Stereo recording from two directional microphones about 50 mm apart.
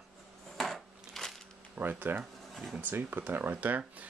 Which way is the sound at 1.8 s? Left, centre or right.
Right.